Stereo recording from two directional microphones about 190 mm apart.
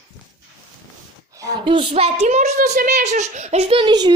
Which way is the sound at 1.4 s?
25° right (ahead or behind).